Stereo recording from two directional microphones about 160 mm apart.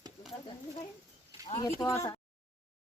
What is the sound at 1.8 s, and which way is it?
Speech, 15° left (ahead or behind).